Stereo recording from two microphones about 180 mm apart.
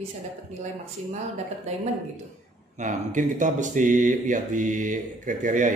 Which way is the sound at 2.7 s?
45° right (ahead or behind).